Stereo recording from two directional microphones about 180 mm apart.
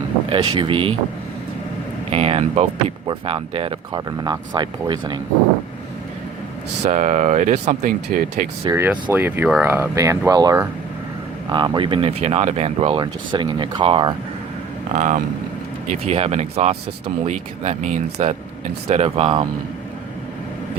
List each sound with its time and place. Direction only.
0.3 s speech: 25° right (ahead or behind)
2.0 s speech: 35° right (ahead or behind)
6.8 s speech: 45° right (ahead or behind)
8.6 s speech: 15° right (ahead or behind)
14.9 s speech: 45° right (ahead or behind)